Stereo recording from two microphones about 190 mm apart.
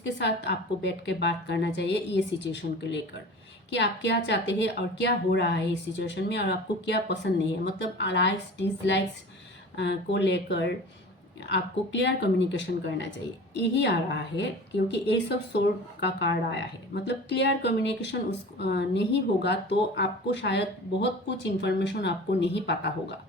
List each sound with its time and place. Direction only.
0.2 s a woman's voice: 65° left (ahead or behind)